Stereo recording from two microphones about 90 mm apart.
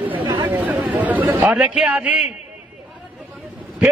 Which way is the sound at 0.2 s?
55° right (ahead or behind).